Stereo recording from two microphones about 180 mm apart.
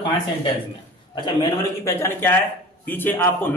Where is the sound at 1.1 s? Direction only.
25° left (ahead or behind).